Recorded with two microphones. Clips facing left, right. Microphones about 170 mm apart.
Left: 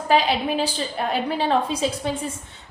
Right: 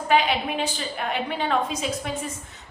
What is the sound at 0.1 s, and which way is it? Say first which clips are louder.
A woman's voice: left 2 dB; 35° left (ahead or behind).